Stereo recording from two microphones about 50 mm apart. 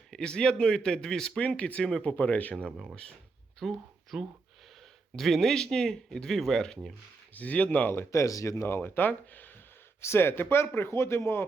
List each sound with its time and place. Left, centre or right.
0.1 s speech: centre
1.4 s speech: left
3.6 s a sound: centre
5.1 s speech: centre
7.3 s speech: left
8.1 s speech: left
8.6 s speech: left
10.0 s speech: left
10.8 s speech: left